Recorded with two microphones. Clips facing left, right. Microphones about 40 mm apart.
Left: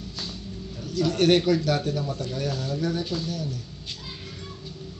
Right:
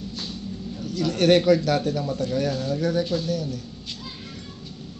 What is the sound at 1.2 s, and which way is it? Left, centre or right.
Speech, right.